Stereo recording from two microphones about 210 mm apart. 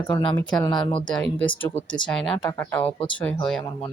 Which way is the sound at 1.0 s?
5° left (ahead or behind).